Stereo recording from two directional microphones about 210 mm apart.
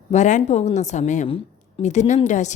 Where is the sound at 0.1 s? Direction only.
35° left (ahead or behind).